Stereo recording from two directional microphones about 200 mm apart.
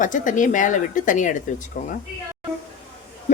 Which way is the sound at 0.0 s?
40° left (ahead or behind).